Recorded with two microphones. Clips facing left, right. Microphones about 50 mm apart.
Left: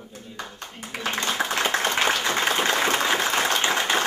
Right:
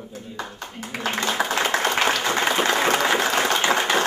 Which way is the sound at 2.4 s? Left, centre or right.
Centre.